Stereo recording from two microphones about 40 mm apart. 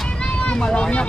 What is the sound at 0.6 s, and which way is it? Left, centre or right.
Speech, left.